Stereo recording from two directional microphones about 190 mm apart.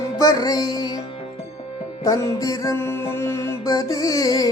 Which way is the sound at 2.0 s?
20° left (ahead or behind).